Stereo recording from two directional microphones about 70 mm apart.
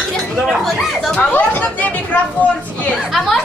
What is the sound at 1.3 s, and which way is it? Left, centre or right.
Chatter, left.